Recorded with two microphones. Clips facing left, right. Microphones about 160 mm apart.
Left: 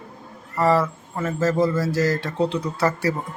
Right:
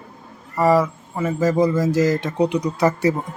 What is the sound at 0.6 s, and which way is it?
Speech, 10° right (ahead or behind).